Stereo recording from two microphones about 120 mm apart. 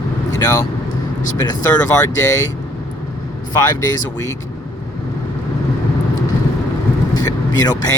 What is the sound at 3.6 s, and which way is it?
Mantra, 30° left (ahead or behind).